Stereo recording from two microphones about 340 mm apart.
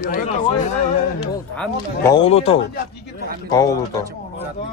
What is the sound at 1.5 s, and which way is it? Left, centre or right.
Speech, centre.